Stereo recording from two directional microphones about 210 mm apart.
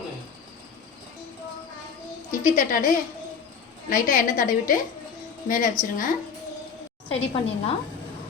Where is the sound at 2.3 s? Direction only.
40° left (ahead or behind).